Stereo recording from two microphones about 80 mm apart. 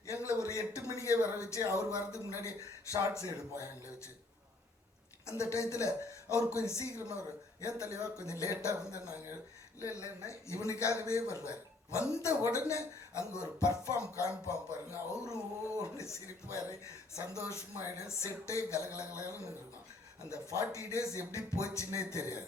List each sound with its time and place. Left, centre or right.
0.1 s a sound: left
2.4 s speech: left
5.2 s speech: left
20.3 s speech: left